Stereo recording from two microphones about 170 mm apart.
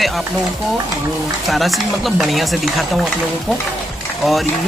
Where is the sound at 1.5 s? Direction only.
Centre (ahead or behind).